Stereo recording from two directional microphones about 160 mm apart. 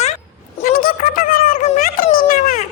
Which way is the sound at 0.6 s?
65° left (ahead or behind).